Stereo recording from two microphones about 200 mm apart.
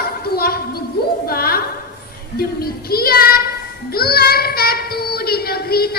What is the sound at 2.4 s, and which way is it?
Child singing, 50° left (ahead or behind).